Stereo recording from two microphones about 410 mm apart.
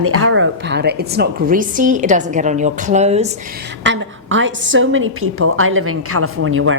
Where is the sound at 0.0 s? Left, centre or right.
Right; by 3.2 s centre.